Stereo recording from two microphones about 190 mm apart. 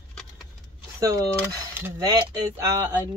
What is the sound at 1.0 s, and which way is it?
Speech, 15° right (ahead or behind).